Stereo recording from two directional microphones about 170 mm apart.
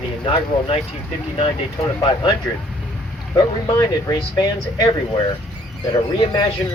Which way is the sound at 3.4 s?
20° left (ahead or behind).